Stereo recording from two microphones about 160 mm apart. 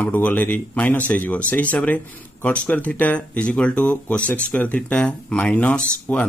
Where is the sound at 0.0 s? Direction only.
10° left (ahead or behind).